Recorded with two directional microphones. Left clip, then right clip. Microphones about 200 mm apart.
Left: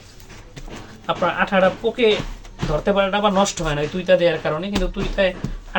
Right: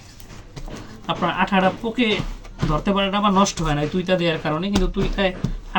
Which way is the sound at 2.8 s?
15° left (ahead or behind).